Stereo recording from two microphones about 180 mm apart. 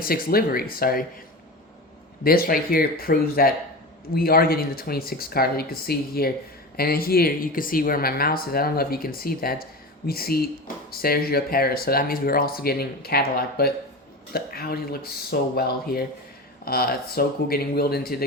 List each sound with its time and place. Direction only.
0.0 s speech: 55° left (ahead or behind)
2.2 s speech: 55° left (ahead or behind)